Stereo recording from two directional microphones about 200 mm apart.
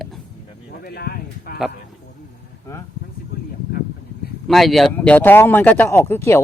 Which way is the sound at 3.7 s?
45° left (ahead or behind).